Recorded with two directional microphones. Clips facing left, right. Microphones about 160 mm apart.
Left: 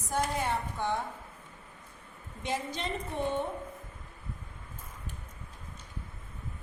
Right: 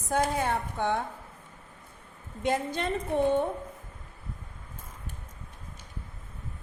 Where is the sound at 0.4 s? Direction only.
60° right (ahead or behind).